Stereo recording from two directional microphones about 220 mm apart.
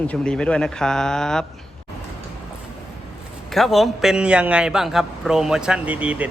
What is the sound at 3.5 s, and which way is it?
A man's voice, centre (ahead or behind).